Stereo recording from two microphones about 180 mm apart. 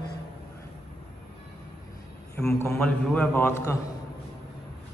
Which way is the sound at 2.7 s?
5° left (ahead or behind).